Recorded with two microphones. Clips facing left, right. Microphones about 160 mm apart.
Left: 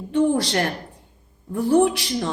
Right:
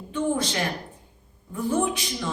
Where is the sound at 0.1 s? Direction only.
70° left (ahead or behind).